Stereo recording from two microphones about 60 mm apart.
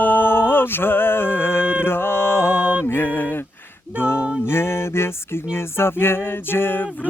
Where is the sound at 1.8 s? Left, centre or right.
Left.